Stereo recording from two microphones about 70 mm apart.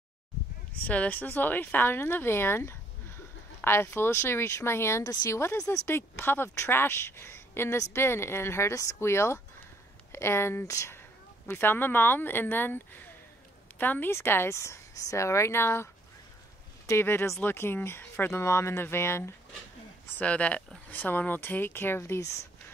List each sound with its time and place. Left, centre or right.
0.8 s a woman's voice: left
5.0 s speech: left
5.3 s a woman's voice: left
10.6 s speech: left
11.0 s a woman's voice: left
18.4 s a woman's voice: left
20.2 s speech: centre; by 22.5 s left